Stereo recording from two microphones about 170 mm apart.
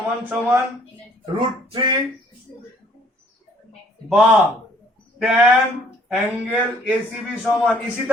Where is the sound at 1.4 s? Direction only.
30° right (ahead or behind).